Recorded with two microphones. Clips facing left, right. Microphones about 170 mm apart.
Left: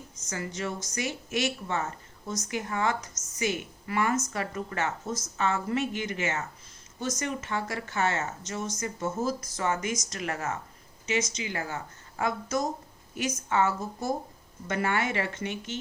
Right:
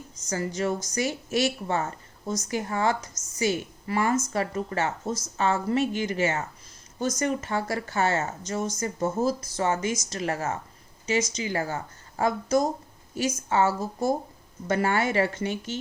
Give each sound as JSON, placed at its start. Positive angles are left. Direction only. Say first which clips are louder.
{"t": 0.3, "sound": "a woman's voice", "louder": "right 6 dB", "side_deg": -35}